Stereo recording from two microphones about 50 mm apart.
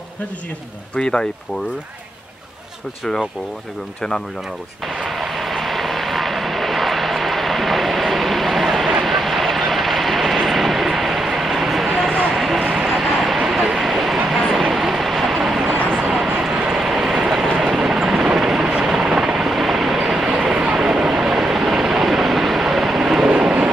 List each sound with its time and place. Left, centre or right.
0.9 s speech: centre
4.8 s vehicle: centre
12.4 s a sound: centre
12.7 s vehicle: centre
17.6 s helicopter: centre
20.3 s vehicle: centre